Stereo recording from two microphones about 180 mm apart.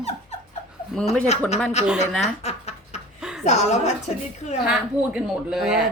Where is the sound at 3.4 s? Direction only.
40° left (ahead or behind).